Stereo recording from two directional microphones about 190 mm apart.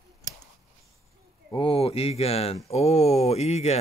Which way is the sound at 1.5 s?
30° left (ahead or behind).